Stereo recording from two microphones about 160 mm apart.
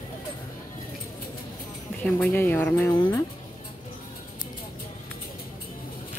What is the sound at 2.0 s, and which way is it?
Speech, 10° left (ahead or behind).